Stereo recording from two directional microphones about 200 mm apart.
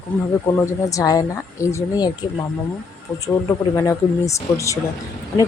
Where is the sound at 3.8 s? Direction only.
15° left (ahead or behind).